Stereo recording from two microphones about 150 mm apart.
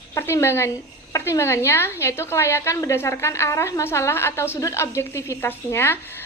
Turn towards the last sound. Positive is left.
turn(degrees=15)  # may be behind; listen again after turning